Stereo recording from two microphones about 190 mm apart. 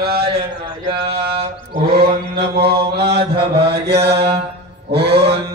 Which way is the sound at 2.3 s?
55° right (ahead or behind).